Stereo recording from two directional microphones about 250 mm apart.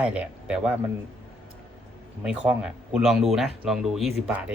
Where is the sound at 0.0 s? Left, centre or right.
Centre.